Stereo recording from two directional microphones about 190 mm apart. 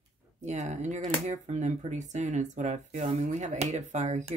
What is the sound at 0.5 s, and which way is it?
Speech, 40° right (ahead or behind).